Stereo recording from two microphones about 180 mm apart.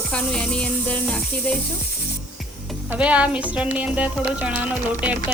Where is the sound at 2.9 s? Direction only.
5° right (ahead or behind).